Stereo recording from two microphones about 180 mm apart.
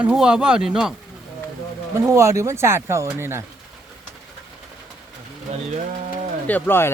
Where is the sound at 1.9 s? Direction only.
15° right (ahead or behind).